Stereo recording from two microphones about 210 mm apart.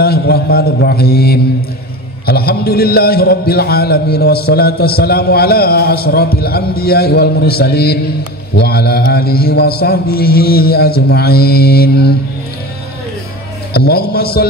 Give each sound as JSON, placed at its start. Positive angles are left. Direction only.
{"t": 0.0, "sound": "a man's voice", "side_deg": 45}
{"t": 13.7, "sound": "a man's voice", "side_deg": 45}